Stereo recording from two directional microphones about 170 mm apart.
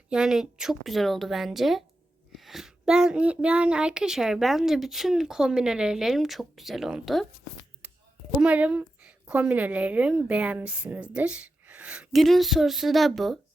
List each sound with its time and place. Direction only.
0.1 s a child's voice: 5° right (ahead or behind)
7.8 s chop: 10° right (ahead or behind)
8.3 s a woman's voice: 5° right (ahead or behind)